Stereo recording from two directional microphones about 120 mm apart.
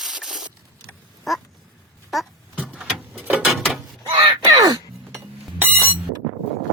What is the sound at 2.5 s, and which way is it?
Vehicle, 10° right (ahead or behind).